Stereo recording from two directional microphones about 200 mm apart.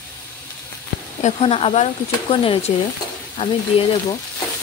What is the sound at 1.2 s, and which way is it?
Speech, 30° left (ahead or behind).